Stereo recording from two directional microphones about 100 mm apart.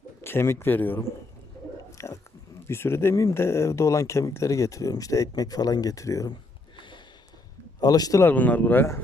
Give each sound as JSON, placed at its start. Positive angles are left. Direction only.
{"t": 0.2, "sound": "speech", "side_deg": 25}
{"t": 1.9, "sound": "a sound", "side_deg": 30}
{"t": 2.6, "sound": "speech", "side_deg": 25}
{"t": 6.7, "sound": "a sound", "side_deg": 50}
{"t": 7.8, "sound": "speech", "side_deg": 40}
{"t": 8.2, "sound": "speech", "side_deg": 15}